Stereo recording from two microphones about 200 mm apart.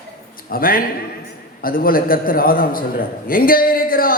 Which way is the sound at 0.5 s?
45° left (ahead or behind).